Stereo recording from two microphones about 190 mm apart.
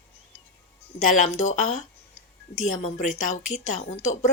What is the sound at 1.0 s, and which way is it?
A woman's voice, 40° left (ahead or behind).